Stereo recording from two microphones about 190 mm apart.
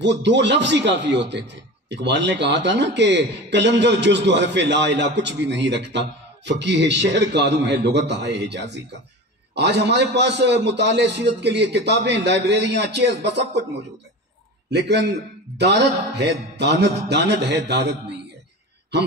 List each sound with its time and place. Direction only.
0.0 s a man's voice: 70° right (ahead or behind)
14.7 s a man's voice: 65° right (ahead or behind)